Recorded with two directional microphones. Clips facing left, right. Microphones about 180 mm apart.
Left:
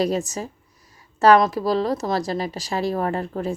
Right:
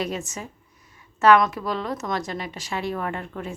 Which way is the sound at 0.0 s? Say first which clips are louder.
Left 7 dB; 35° left (ahead or behind).